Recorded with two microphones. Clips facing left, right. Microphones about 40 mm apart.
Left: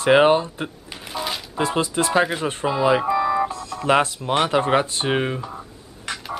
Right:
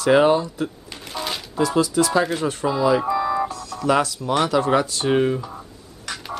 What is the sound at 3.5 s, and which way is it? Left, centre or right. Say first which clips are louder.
Speech: left 1 dB; left.